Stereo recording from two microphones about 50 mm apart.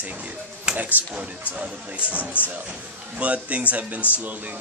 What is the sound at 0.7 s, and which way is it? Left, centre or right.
Music, right.